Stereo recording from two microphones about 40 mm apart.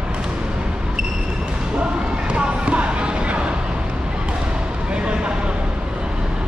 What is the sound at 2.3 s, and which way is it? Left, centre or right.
Music, right.